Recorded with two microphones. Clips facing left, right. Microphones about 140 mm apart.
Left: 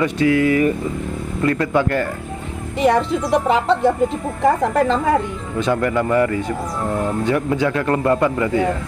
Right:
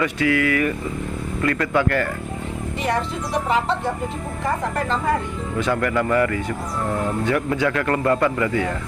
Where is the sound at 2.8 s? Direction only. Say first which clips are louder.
Left 8 dB; 85° left.